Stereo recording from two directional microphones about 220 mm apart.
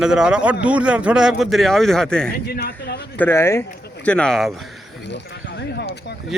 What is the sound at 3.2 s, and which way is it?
A man's voice, 10° left (ahead or behind).